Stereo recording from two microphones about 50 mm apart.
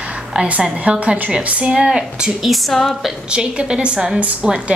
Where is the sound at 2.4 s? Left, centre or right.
Centre.